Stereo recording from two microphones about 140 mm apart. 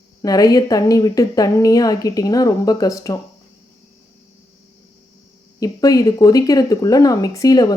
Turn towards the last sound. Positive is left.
turn(degrees=25)  # may be behind; listen again after turning